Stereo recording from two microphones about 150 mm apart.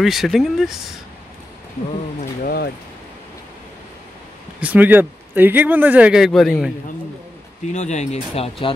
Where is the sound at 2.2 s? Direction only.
80° left.